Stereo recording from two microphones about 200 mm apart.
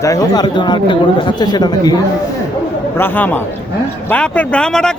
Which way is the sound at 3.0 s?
10° left (ahead or behind).